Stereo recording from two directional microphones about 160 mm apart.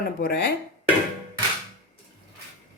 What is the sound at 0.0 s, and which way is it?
Speech, 70° left (ahead or behind).